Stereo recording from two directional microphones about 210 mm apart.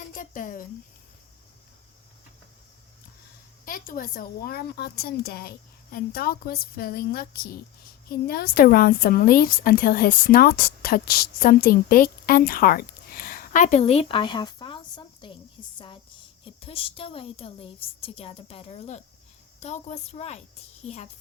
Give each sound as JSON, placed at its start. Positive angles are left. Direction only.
{"t": 0.2, "sound": "speech", "side_deg": 40}
{"t": 3.7, "sound": "a woman's voice", "side_deg": 40}
{"t": 16.4, "sound": "a woman's voice", "side_deg": 25}